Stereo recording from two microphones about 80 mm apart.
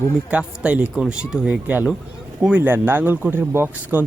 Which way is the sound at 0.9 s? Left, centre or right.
Centre.